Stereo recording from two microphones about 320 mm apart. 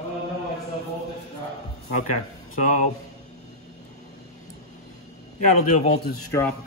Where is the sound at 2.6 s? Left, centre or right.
Left.